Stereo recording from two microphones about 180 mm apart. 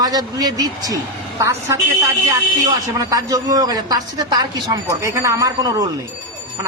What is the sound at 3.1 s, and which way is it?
Speech, 20° right (ahead or behind).